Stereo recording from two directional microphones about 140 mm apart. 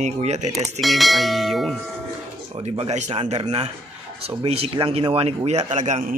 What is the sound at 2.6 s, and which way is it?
A man's voice, 45° right (ahead or behind).